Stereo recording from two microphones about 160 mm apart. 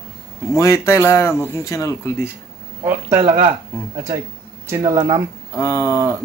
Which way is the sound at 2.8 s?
20° right (ahead or behind).